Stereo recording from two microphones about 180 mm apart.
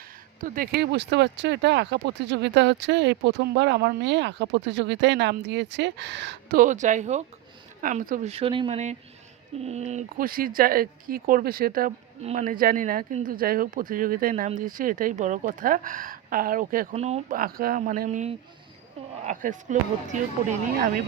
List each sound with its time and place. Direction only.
0.4 s speech: 50° right (ahead or behind); by 6.6 s 75° right (ahead or behind)
6.6 s speech: 45° right (ahead or behind)
8.3 s speech: 30° right (ahead or behind)
10.2 s speech: 55° right (ahead or behind)
12.2 s speech: 40° right (ahead or behind)
16.9 s speech: 35° right (ahead or behind)
17.3 s speech: 55° right (ahead or behind)